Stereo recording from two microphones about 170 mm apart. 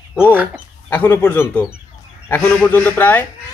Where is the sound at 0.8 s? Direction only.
10° left (ahead or behind).